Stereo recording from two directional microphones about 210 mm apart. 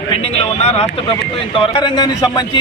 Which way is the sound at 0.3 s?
30° left (ahead or behind).